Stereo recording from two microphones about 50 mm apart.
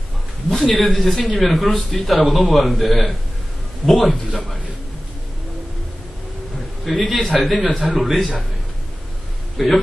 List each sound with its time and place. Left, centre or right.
0.5 s speech: centre
6.9 s speech: centre
9.6 s speech: centre